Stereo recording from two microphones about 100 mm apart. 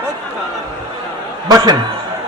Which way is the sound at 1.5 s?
40° right (ahead or behind).